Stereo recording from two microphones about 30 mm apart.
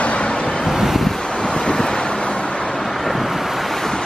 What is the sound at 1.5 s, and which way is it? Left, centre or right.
Vehicle, left.